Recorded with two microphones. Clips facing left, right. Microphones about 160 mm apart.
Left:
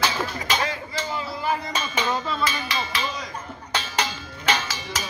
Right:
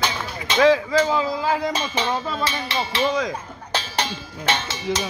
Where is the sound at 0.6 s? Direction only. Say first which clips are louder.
Right 13 dB; 90° right.